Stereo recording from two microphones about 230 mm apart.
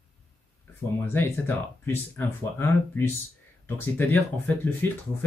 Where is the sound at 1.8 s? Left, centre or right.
Centre.